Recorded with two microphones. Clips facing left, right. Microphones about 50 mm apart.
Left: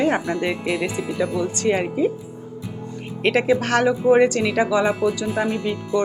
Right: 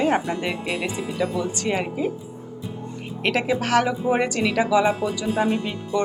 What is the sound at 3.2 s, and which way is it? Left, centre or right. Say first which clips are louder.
Speech: left 4 dB; centre.